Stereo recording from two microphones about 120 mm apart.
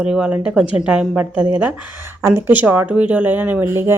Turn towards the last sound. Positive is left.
turn(degrees=-20)  # may be behind; listen again after turning